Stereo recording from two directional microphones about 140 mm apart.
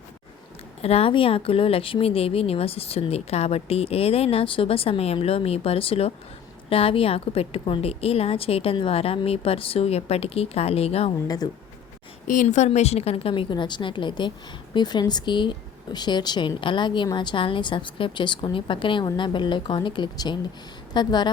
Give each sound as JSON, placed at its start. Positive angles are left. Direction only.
{"t": 0.8, "sound": "speech", "side_deg": 45}
{"t": 12.3, "sound": "a woman's voice", "side_deg": 65}